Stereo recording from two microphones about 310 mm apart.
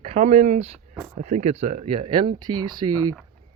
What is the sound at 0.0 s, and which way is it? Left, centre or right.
Speech, centre.